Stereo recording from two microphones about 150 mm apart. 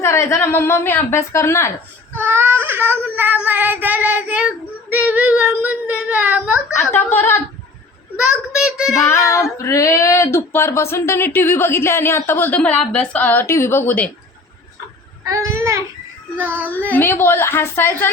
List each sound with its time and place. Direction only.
0.0 s a woman's voice: 20° left (ahead or behind)
2.1 s child singing: 15° right (ahead or behind)
6.7 s a woman's voice: 15° left (ahead or behind)
8.1 s a child's voice: 5° right (ahead or behind)
9.0 s child singing: 20° left (ahead or behind)
10.9 s a woman's voice: 15° left (ahead or behind)
15.2 s a child's voice: 20° right (ahead or behind)
16.4 s child singing: 15° right (ahead or behind)
16.9 s a woman's voice: 15° left (ahead or behind)